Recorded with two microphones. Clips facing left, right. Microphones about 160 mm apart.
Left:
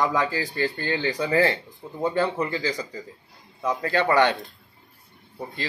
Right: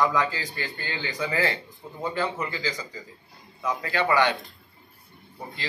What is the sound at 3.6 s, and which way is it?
Speech, 30° left (ahead or behind).